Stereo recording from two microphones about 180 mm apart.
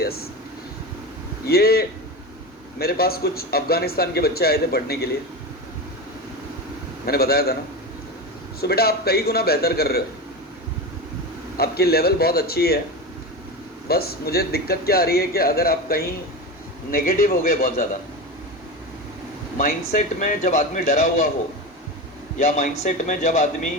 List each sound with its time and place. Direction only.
0.0 s speech: 60° left (ahead or behind)
1.5 s a man's voice: 60° left (ahead or behind)
7.0 s a man's voice: 60° left (ahead or behind)
8.6 s a man's voice: 60° left (ahead or behind)
11.5 s a man's voice: 60° left (ahead or behind)
13.8 s a man's voice: 60° left (ahead or behind)
19.5 s speech: 50° left (ahead or behind)
22.4 s speech: 45° left (ahead or behind)